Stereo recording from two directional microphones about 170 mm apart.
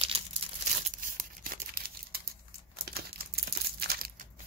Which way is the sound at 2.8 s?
65° right (ahead or behind).